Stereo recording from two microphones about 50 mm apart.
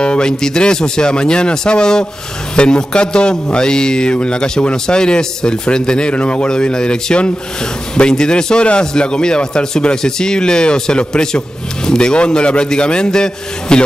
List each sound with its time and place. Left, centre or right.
0.0 s a man's voice: centre